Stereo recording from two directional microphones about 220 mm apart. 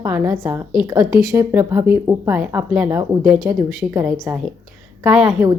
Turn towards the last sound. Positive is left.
turn(degrees=-5)  # may be behind; listen again after turning